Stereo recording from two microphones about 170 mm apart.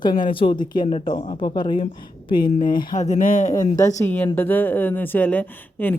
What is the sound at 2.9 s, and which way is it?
Speech, 45° left (ahead or behind).